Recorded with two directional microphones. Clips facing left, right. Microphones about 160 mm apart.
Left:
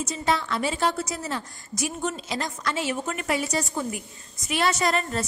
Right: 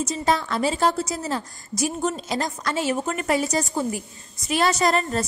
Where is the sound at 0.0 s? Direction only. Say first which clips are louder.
Right 3 dB; 40° right (ahead or behind).